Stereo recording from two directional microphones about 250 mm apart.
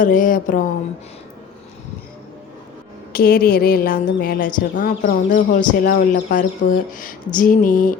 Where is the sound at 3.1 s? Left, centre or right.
Left.